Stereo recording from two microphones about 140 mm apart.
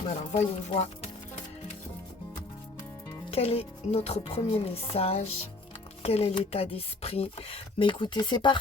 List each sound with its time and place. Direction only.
0.3 s speech: 45° left (ahead or behind)
3.2 s speech: 45° left (ahead or behind)